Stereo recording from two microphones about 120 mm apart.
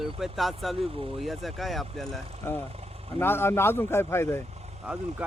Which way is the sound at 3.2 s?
20° left (ahead or behind).